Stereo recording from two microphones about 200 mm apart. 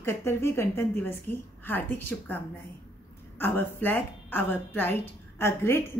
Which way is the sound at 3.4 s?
10° left (ahead or behind).